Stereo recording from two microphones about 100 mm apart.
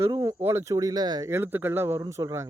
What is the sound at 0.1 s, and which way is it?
Speech, 30° right (ahead or behind).